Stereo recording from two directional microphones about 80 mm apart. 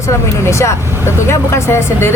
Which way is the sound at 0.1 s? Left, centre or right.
Left.